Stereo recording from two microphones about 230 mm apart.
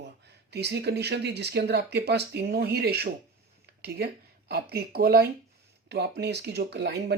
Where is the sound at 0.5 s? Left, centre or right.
Right.